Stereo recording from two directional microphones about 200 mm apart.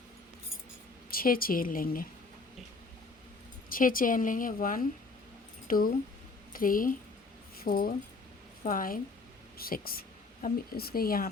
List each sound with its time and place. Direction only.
1.1 s a woman's voice: 45° left (ahead or behind)
3.7 s a woman's voice: 45° left (ahead or behind)